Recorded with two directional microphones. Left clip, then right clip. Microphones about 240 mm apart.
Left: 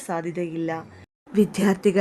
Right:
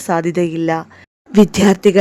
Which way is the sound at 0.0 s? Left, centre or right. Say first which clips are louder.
Right 11 dB; right.